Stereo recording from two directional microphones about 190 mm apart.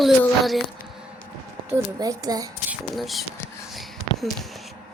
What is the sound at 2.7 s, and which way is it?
Speech, centre (ahead or behind).